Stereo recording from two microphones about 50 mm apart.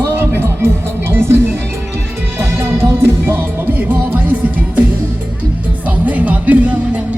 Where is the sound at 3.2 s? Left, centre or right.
Right.